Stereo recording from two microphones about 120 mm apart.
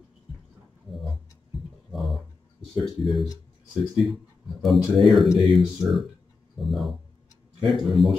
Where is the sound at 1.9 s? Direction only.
Centre (ahead or behind).